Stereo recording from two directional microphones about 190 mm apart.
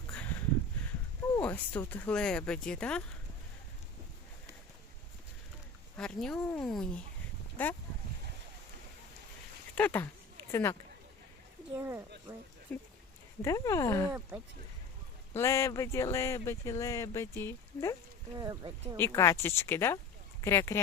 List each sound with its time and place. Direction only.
0.1 s a sound: 10° left (ahead or behind)
1.4 s speech: 10° left (ahead or behind)
6.0 s speech: 5° left (ahead or behind)
9.7 s speech: 10° left (ahead or behind)
11.7 s speech: 10° right (ahead or behind)
12.7 s speech: 5° left (ahead or behind)
14.1 s speech: 15° right (ahead or behind)
15.3 s speech: 15° left (ahead or behind)
18.3 s speech: 20° right (ahead or behind)
18.9 s speech: 15° left (ahead or behind)